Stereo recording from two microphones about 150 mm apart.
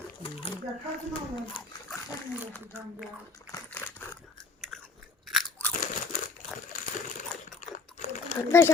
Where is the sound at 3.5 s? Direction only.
15° left (ahead or behind).